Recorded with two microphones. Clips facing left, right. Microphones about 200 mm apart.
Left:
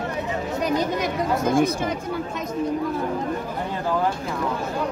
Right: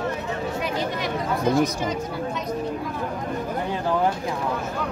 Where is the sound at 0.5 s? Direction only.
40° left (ahead or behind).